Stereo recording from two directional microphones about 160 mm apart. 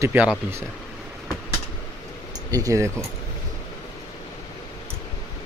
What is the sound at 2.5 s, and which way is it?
Speech, 20° right (ahead or behind).